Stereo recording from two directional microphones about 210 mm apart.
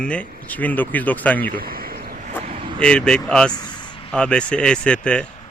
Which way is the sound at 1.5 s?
45° right (ahead or behind).